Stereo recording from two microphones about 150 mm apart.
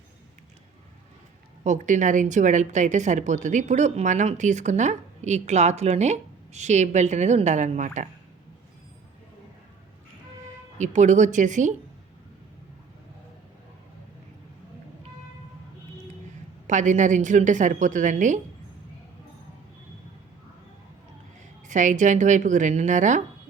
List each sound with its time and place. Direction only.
1.6 s a woman's voice: 55° right (ahead or behind)
10.8 s a woman's voice: 55° right (ahead or behind)
16.6 s a woman's voice: 55° right (ahead or behind)
21.7 s a woman's voice: 55° right (ahead or behind)